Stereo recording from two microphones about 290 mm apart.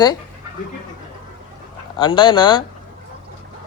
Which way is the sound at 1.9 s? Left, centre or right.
Centre.